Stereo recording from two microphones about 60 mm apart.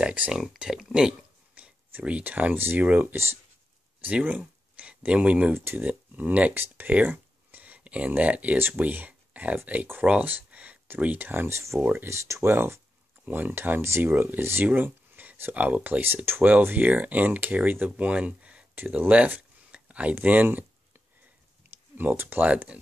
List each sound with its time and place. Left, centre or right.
0.0 s speech: right
0.3 s speech: centre
1.5 s a sound: right
2.6 s speech: right
4.0 s speech: right
5.5 s speech: right
5.8 s speech: right
6.9 s a sound: right
8.5 s speech: right
11.5 s speech: right
11.8 s speech: right
13.2 s speech: right